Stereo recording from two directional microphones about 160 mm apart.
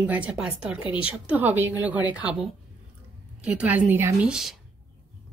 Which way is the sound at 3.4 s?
5° right (ahead or behind).